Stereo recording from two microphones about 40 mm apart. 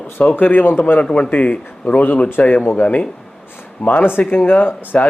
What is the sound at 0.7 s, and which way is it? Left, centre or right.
Speech, left.